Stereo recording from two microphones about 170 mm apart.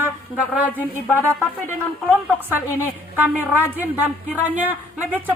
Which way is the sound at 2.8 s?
10° right (ahead or behind).